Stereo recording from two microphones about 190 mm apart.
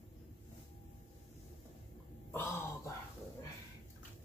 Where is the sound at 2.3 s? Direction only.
15° left (ahead or behind).